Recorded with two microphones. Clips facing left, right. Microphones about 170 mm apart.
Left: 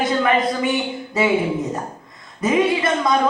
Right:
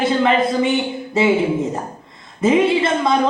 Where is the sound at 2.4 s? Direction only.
25° right (ahead or behind).